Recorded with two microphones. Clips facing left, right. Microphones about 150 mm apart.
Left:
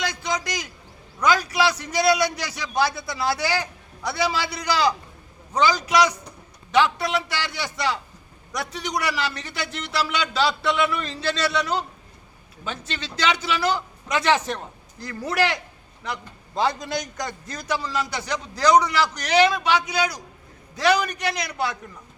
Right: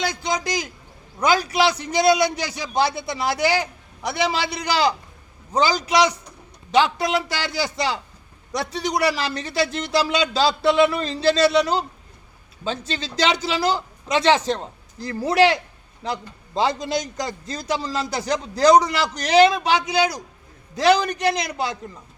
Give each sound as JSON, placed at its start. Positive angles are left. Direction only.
{"t": 0.0, "sound": "a man's voice", "side_deg": -25}